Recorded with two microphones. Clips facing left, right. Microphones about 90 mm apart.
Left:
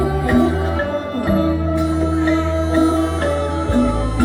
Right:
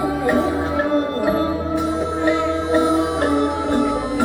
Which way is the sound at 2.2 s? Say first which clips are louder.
Left 1 dB; 15° right (ahead or behind).